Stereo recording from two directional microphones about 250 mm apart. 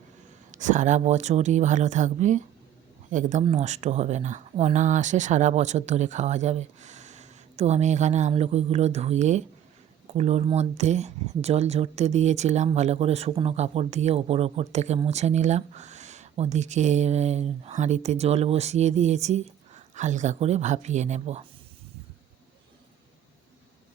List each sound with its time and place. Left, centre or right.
0.5 s speech: right